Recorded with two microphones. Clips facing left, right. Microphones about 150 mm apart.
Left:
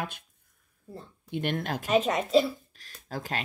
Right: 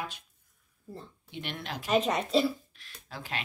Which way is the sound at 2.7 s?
40° left (ahead or behind).